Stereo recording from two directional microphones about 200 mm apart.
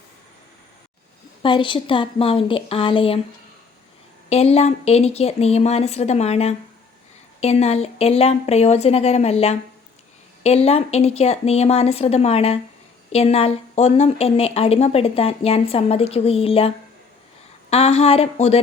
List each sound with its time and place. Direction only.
1.4 s speech: 25° left (ahead or behind)
4.3 s speech: 30° left (ahead or behind)